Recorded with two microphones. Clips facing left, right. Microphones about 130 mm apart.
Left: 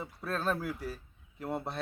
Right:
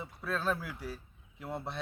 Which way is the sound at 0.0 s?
40° left (ahead or behind).